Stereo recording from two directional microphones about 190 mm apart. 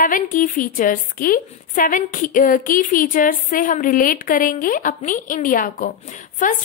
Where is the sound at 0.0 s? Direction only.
45° left (ahead or behind).